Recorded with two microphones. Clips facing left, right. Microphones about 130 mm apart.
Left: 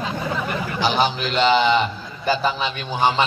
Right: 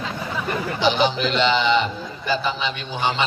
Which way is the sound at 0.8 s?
45° left (ahead or behind).